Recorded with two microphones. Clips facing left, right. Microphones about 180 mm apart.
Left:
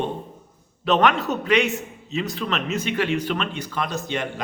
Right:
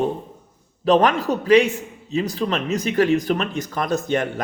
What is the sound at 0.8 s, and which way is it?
A man's voice, 35° right (ahead or behind).